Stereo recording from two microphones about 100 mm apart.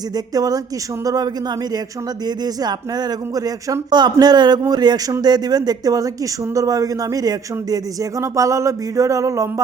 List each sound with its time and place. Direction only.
0.3 s speech: 40° right (ahead or behind)